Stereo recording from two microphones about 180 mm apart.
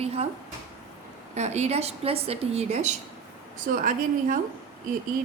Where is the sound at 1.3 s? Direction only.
40° right (ahead or behind).